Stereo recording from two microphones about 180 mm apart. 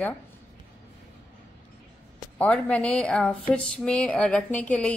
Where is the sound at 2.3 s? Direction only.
10° left (ahead or behind).